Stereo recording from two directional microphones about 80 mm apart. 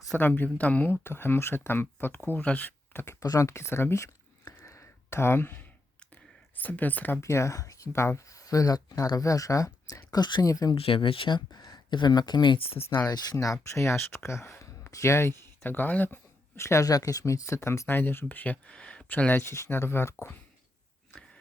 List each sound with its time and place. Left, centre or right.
0.2 s speech: left
3.2 s speech: left
4.4 s a sound: left
6.6 s speech: left
7.2 s speech: left
10.1 s a woman's voice: left
10.4 s speech: left
11.0 s speech: left
13.0 s speech: left
16.8 s speech: left